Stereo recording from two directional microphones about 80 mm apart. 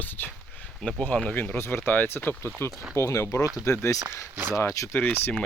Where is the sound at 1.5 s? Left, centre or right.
Left.